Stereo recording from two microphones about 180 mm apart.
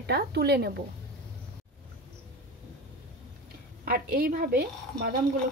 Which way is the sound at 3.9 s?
55° right (ahead or behind).